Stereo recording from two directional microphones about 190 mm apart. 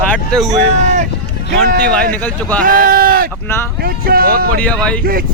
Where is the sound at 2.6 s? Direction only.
45° right (ahead or behind).